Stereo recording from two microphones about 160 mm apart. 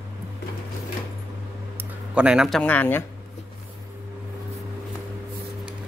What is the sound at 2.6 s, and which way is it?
Speech, 10° left (ahead or behind).